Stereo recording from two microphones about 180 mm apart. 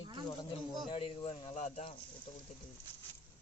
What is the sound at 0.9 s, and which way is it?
Speech, 30° left (ahead or behind).